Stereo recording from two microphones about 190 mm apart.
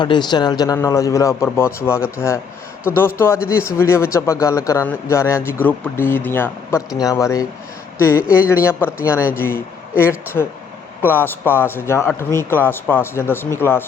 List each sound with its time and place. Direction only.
0.0 s speech: 25° left (ahead or behind)